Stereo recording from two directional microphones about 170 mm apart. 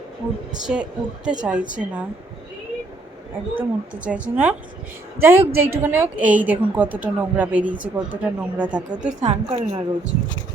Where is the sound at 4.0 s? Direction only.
10° right (ahead or behind).